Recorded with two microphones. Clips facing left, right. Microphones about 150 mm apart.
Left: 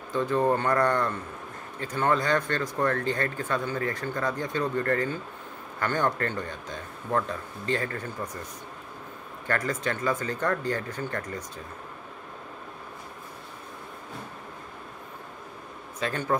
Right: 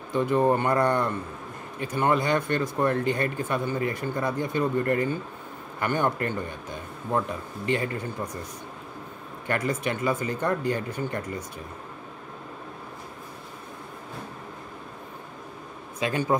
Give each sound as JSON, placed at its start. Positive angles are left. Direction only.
{"t": 0.1, "sound": "a man's voice", "side_deg": -15}
{"t": 9.5, "sound": "a man's voice", "side_deg": -15}
{"t": 16.0, "sound": "a man's voice", "side_deg": -15}